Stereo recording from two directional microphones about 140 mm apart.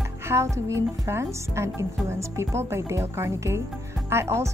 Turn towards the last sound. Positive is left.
turn(degrees=-20)  # may be behind; listen again after turning